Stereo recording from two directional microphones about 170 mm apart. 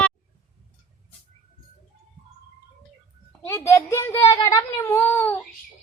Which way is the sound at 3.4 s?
15° left (ahead or behind).